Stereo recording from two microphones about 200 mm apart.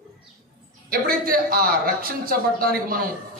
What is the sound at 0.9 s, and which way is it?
Speech, 45° right (ahead or behind).